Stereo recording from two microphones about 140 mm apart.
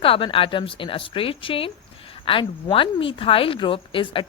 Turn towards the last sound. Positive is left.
turn(degrees=40)  # may be behind; listen again after turning